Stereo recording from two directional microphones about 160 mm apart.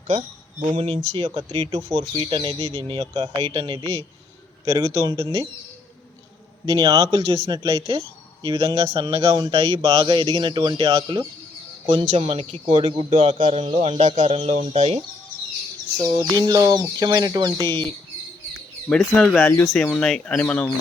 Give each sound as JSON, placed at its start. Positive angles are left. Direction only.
{"t": 0.1, "sound": "speech", "side_deg": -25}
{"t": 4.6, "sound": "speech", "side_deg": -20}
{"t": 6.7, "sound": "a man's voice", "side_deg": -20}
{"t": 16.3, "sound": "speech", "side_deg": -25}
{"t": 18.9, "sound": "speech", "side_deg": 5}